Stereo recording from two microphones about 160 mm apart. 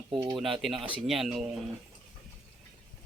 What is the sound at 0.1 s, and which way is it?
Speech, 25° right (ahead or behind).